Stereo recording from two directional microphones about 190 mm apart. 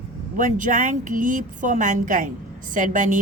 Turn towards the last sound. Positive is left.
turn(degrees=-40)  # may be behind; listen again after turning